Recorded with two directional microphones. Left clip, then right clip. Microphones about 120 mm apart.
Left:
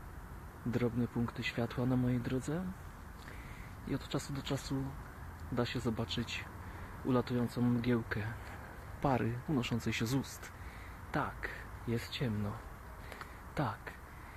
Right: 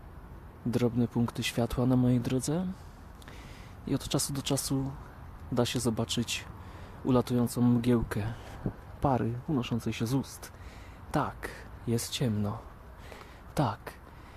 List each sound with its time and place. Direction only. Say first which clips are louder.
0.7 s speech: right 6 dB; 60° right (ahead or behind)
3.8 s speech: right 7 dB; 60° right (ahead or behind)
9.0 s speech: right 4 dB; 35° right (ahead or behind); by 13.9 s 60° right (ahead or behind)